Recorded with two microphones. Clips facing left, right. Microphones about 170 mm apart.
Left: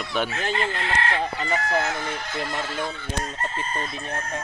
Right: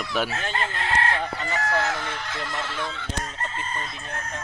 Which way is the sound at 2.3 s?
35° left (ahead or behind).